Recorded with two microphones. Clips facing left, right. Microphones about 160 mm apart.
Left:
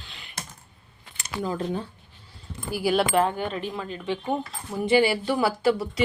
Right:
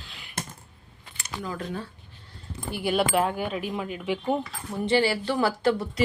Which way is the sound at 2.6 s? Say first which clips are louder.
Left 2 dB; 5° left (ahead or behind).